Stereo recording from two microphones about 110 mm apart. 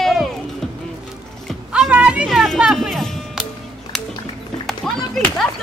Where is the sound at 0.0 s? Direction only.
Centre (ahead or behind).